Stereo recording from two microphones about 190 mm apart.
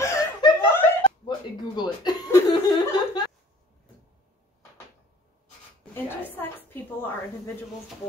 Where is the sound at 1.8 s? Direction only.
20° left (ahead or behind).